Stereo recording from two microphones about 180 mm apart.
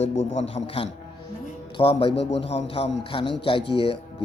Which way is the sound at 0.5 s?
30° left (ahead or behind).